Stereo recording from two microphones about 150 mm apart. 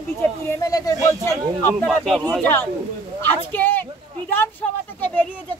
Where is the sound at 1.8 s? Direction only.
5° left (ahead or behind).